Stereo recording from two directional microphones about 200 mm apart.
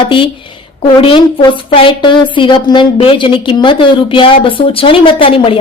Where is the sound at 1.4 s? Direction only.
25° left (ahead or behind).